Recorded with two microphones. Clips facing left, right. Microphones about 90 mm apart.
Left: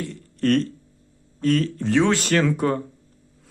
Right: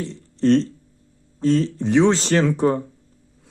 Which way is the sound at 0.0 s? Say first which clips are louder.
Right 3 dB; 20° right (ahead or behind).